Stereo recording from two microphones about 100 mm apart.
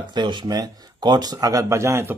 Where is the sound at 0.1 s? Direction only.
50° right (ahead or behind).